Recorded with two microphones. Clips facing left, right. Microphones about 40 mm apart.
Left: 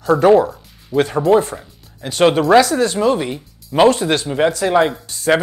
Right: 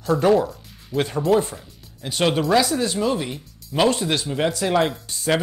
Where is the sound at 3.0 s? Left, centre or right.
Left.